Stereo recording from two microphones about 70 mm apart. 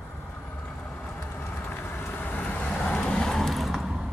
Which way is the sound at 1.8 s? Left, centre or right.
Left.